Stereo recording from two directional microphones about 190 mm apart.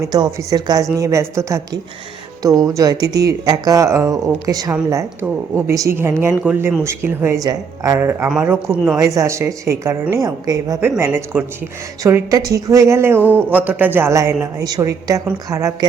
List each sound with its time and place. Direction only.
0.0 s speech: 20° right (ahead or behind)